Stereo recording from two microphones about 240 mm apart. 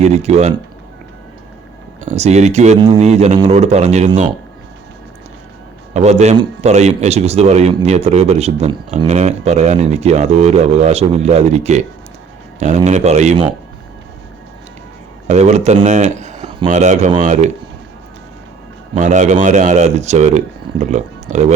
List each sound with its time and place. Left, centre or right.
0.0 s a man's voice: right
2.0 s a man's voice: right
5.9 s a man's voice: right
15.3 s a man's voice: right
18.9 s a man's voice: right